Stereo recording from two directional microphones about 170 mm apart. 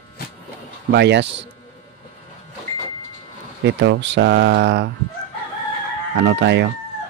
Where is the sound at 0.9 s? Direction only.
90° right.